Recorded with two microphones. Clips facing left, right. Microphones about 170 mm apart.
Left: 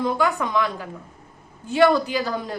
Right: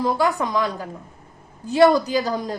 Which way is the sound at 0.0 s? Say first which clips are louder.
Right 1 dB; 35° right (ahead or behind).